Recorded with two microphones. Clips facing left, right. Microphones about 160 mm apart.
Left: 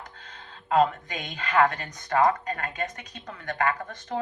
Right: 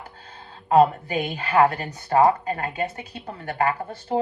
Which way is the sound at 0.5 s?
35° right (ahead or behind).